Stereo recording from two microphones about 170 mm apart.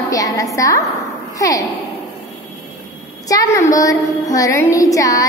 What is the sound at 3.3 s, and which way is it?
A woman's voice, 20° left (ahead or behind).